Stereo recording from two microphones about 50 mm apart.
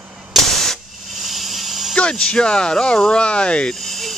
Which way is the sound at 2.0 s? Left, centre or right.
Centre.